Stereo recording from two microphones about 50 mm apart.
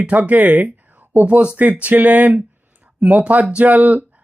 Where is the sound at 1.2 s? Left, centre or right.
Right.